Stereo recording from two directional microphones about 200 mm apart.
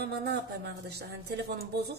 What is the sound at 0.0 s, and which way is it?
A woman's voice, 55° right (ahead or behind).